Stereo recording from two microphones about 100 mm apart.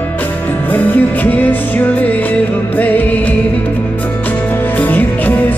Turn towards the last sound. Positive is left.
turn(degrees=15)  # may be behind; listen again after turning